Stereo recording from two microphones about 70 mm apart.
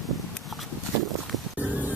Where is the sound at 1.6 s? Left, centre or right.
Right.